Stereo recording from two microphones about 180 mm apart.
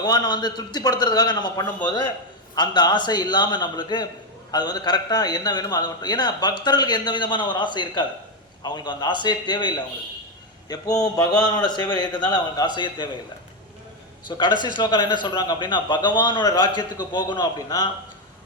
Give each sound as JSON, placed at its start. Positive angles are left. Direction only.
{"t": 0.0, "sound": "a man's voice", "side_deg": 20}
{"t": 14.3, "sound": "a man's voice", "side_deg": 25}